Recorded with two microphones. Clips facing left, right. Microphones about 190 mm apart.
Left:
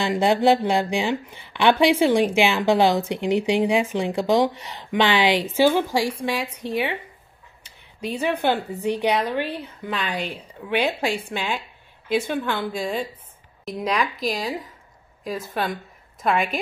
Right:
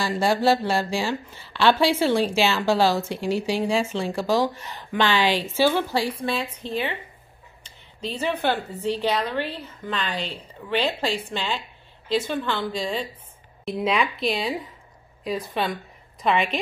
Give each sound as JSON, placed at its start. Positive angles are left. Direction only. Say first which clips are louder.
{"t": 0.0, "sound": "a woman's voice", "louder": "left 3 dB", "side_deg": 20}
{"t": 13.7, "sound": "speech", "louder": "right 1 dB", "side_deg": -5}
{"t": 15.2, "sound": "speech", "louder": "right 2 dB", "side_deg": 45}
{"t": 15.5, "sound": "a woman's voice", "louder": "even", "side_deg": 0}